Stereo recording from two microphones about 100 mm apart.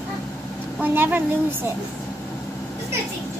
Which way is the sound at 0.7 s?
20° right (ahead or behind).